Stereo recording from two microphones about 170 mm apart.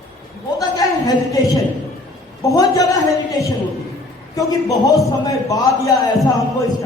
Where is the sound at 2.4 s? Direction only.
20° left (ahead or behind).